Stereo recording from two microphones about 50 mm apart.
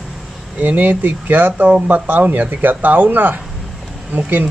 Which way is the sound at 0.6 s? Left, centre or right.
Right.